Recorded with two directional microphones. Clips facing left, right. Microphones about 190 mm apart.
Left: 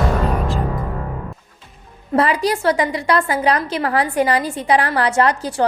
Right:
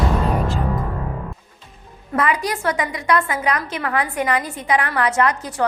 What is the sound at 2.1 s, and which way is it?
A woman's voice, 30° left (ahead or behind).